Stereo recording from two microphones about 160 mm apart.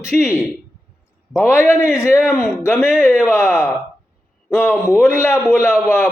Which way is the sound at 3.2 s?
15° left (ahead or behind).